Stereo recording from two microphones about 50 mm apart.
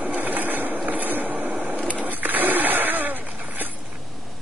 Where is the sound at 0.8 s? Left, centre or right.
Right.